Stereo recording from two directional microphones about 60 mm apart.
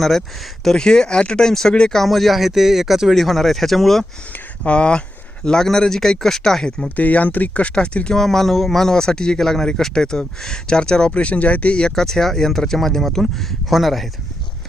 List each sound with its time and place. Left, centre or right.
0.0 s speech: centre
4.3 s speech: left
6.8 s speech: left
8.2 s speech: centre